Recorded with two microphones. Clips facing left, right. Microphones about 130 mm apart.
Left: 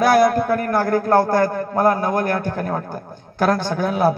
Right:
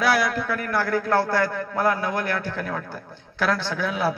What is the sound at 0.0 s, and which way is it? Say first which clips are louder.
A man's voice: left 8 dB; 45° left (ahead or behind).